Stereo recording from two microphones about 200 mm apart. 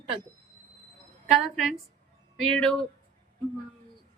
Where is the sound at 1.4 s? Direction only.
Centre (ahead or behind).